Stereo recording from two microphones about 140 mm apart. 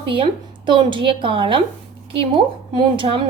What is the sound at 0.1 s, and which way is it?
A woman's voice, 35° right (ahead or behind).